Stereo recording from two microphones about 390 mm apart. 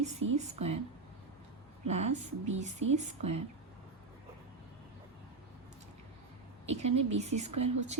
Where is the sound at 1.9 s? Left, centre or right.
Centre.